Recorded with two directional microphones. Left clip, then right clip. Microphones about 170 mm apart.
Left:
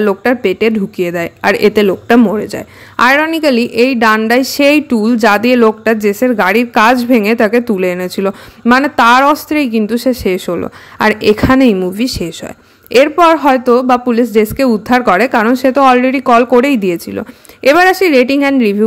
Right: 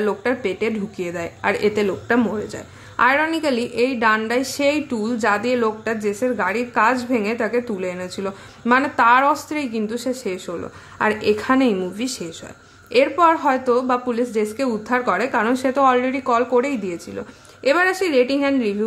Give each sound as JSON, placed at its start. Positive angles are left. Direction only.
{"t": 0.0, "sound": "a woman's voice", "side_deg": 40}
{"t": 2.3, "sound": "a woman's voice", "side_deg": 45}